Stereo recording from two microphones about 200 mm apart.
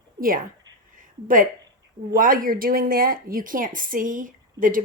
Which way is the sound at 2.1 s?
45° right (ahead or behind).